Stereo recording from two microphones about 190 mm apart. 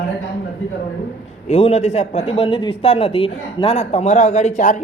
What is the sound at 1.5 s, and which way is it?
A man's voice, 35° left (ahead or behind).